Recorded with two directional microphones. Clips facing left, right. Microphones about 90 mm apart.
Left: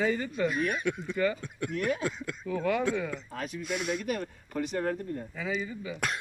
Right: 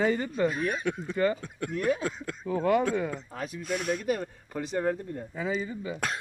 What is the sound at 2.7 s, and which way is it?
Speech, 45° right (ahead or behind).